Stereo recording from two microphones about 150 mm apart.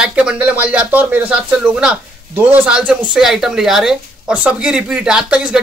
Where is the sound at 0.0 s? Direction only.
5° right (ahead or behind).